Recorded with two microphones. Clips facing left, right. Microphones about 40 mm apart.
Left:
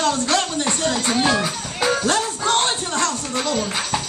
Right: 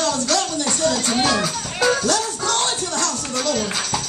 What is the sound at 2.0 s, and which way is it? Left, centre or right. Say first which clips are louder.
Music: left 1 dB; left.